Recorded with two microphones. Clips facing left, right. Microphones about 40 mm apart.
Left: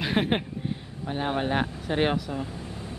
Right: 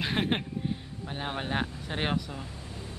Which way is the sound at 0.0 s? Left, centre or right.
Centre.